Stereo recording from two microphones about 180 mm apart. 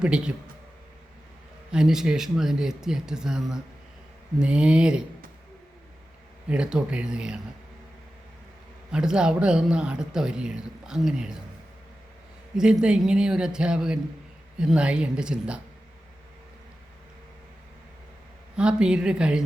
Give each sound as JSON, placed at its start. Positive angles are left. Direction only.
{"t": 0.0, "sound": "speech", "side_deg": -5}
{"t": 1.7, "sound": "speech", "side_deg": -5}
{"t": 6.5, "sound": "speech", "side_deg": -5}
{"t": 8.9, "sound": "speech", "side_deg": -5}
{"t": 12.5, "sound": "speech", "side_deg": -5}
{"t": 18.5, "sound": "speech", "side_deg": -5}